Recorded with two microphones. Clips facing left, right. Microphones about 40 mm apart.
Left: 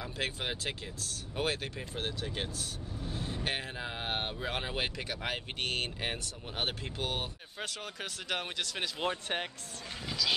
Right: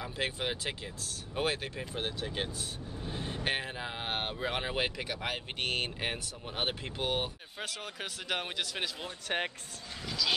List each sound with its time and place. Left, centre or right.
0.0 s speech: centre
3.0 s vehicle: right
3.4 s speech: centre